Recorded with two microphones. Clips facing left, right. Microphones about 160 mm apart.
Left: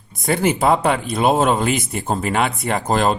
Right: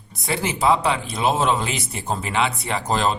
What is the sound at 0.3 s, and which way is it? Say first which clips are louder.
Speech: left 4 dB; 50° left (ahead or behind).